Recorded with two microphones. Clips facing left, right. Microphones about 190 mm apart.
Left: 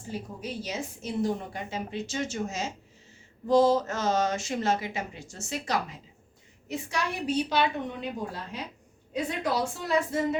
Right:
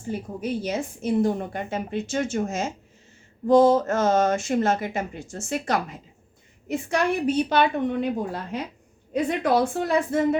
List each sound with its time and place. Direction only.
0.1 s a woman's voice: 55° right (ahead or behind)